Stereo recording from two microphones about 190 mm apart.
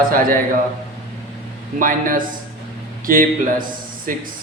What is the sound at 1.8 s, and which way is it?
A man's voice, 45° right (ahead or behind).